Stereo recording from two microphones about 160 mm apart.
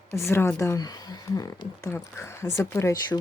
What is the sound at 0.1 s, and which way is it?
Speech, 15° left (ahead or behind).